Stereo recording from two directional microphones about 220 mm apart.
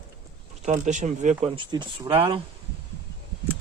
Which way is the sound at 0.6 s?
35° right (ahead or behind).